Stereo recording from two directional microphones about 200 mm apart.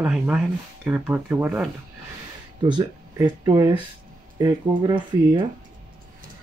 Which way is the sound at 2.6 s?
20° right (ahead or behind).